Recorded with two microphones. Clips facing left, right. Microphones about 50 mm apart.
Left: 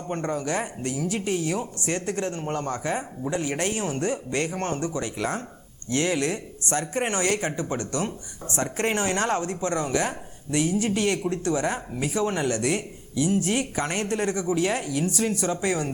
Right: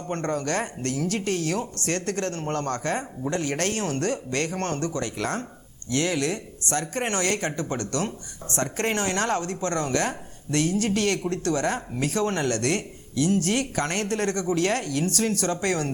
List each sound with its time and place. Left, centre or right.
0.1 s speech: centre
5.9 s speech: left; by 15.9 s centre